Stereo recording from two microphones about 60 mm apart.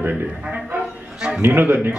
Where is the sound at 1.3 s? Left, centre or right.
Right.